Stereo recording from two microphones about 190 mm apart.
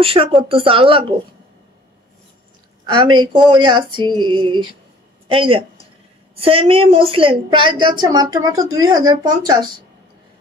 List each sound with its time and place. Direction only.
0.0 s a woman's voice: 30° right (ahead or behind)
2.9 s a woman's voice: 25° right (ahead or behind)